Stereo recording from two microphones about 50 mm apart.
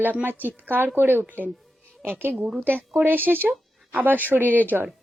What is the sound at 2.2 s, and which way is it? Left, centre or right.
A woman's voice, right.